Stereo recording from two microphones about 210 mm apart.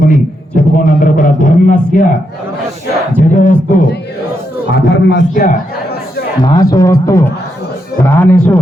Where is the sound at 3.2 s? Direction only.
35° left (ahead or behind).